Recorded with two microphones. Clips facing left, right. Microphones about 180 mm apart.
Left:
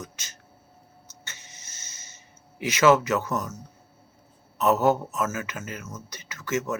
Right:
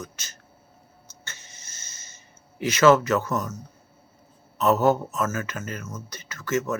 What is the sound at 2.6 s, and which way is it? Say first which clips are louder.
Speech: right 2 dB; 15° left (ahead or behind).